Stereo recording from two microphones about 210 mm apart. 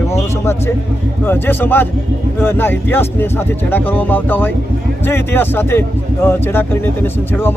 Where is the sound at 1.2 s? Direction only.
10° left (ahead or behind).